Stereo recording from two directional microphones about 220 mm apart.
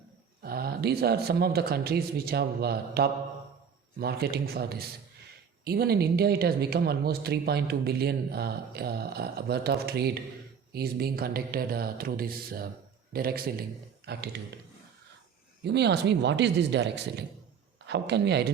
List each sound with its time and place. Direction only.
0.4 s speech: 45° right (ahead or behind)
15.6 s speech: 50° right (ahead or behind)